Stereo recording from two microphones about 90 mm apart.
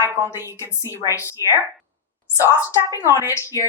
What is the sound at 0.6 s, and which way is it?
A woman's voice, 40° left (ahead or behind).